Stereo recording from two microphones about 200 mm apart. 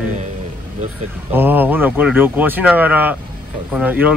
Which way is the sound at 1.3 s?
10° right (ahead or behind).